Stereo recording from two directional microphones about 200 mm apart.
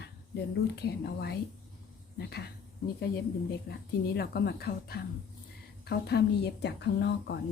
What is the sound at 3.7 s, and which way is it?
A woman's voice, 55° left (ahead or behind).